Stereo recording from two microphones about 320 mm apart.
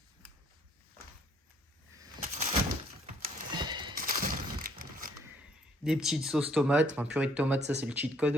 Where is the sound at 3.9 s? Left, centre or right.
Right.